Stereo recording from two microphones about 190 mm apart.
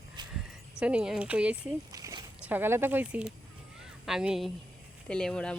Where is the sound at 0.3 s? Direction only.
5° right (ahead or behind).